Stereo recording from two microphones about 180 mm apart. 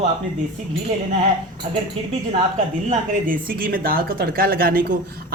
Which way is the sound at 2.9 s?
50° right (ahead or behind).